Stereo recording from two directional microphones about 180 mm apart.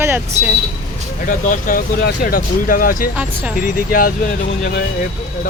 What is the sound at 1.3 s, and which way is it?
Speech, 50° left (ahead or behind).